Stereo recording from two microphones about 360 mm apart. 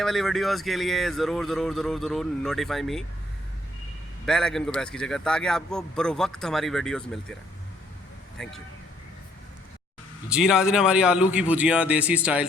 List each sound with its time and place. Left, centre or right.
0.0 s a man's voice: centre
4.3 s a man's voice: centre
8.4 s a man's voice: centre
10.2 s a man's voice: centre